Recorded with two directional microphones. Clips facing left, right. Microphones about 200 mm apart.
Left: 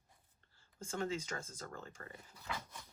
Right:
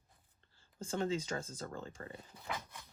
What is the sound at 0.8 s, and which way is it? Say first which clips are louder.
Speech: right 4 dB; 30° right (ahead or behind).